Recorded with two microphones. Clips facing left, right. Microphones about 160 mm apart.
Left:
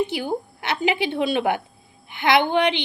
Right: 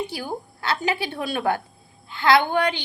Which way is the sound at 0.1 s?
20° left (ahead or behind).